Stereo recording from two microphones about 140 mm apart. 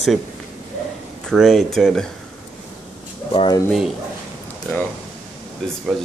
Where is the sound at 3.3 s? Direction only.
35° left (ahead or behind).